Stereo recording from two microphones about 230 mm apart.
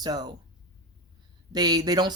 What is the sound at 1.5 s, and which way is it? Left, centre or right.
Speech, centre.